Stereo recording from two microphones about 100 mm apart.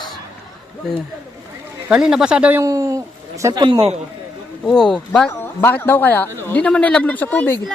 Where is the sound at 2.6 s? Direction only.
35° right (ahead or behind).